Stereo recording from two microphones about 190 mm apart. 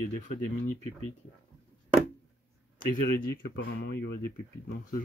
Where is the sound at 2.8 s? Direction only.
50° left (ahead or behind).